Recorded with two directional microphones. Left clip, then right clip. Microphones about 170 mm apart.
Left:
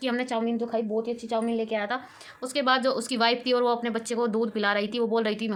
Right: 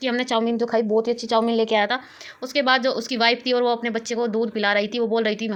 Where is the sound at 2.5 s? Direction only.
15° right (ahead or behind).